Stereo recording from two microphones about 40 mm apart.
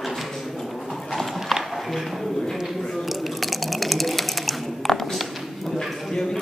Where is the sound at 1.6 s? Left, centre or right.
Centre.